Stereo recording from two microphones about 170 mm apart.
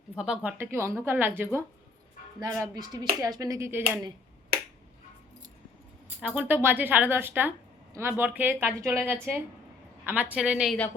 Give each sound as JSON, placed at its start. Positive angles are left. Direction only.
{"t": 0.2, "sound": "a woman's voice", "side_deg": -5}
{"t": 6.1, "sound": "a woman's voice", "side_deg": -5}